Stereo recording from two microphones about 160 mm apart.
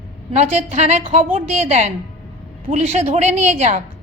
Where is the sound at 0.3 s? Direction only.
45° right (ahead or behind).